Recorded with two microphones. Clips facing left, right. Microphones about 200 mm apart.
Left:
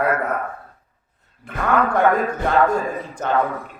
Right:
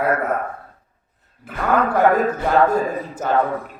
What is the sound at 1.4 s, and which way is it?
A man's voice, 5° right (ahead or behind).